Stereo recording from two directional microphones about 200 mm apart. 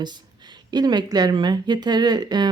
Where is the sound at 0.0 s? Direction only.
20° right (ahead or behind).